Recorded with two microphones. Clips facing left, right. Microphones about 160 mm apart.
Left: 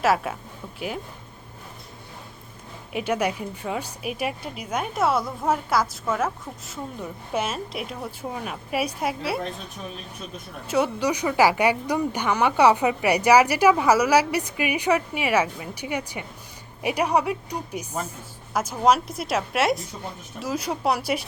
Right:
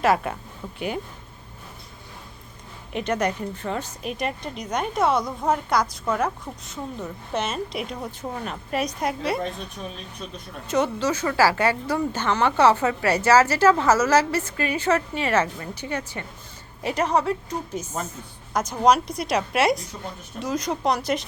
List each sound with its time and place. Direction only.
0.0 s a woman's voice: centre (ahead or behind)
2.9 s a woman's voice: 10° left (ahead or behind)
10.7 s a woman's voice: 10° left (ahead or behind)